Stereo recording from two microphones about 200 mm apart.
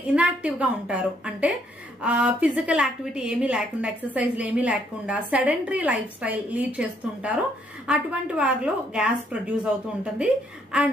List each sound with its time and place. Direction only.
0.1 s a woman's voice: 5° right (ahead or behind)